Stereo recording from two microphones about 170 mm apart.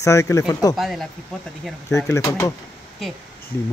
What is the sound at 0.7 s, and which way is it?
Speech, centre (ahead or behind).